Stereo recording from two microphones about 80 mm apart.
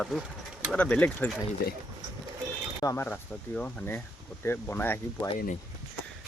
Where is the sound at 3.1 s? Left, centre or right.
Centre.